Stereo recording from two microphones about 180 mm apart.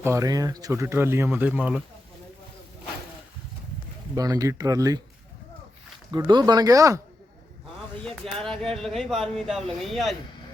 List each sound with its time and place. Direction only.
0.0 s speech: 15° right (ahead or behind)
4.1 s speech: 20° right (ahead or behind)
6.1 s speech: 25° right (ahead or behind)
8.0 s speech: centre (ahead or behind)